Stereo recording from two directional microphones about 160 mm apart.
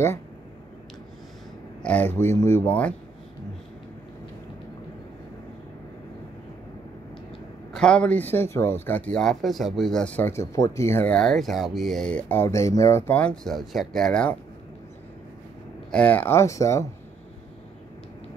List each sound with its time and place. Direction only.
1.8 s speech: 10° left (ahead or behind)
7.7 s speech: 5° left (ahead or behind)
15.9 s speech: 10° left (ahead or behind)